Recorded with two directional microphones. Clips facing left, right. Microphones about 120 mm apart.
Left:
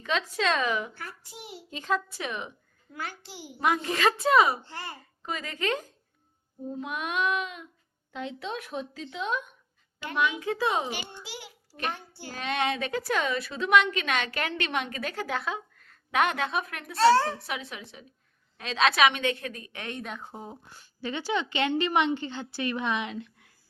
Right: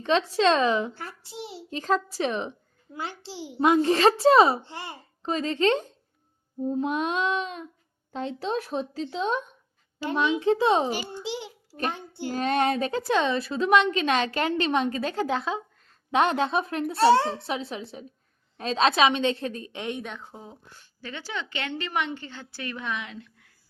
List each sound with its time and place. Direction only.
0.0 s a child's voice: 35° right (ahead or behind)
10.8 s a woman's voice: 40° right (ahead or behind)
11.2 s a child's voice: 25° right (ahead or behind)
12.3 s a woman's voice: 40° right (ahead or behind)
13.0 s a child's voice: 25° right (ahead or behind)
20.0 s speech: centre (ahead or behind)
21.0 s a woman's voice: 15° left (ahead or behind)